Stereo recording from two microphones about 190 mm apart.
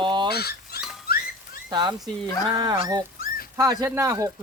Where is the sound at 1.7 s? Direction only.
20° right (ahead or behind).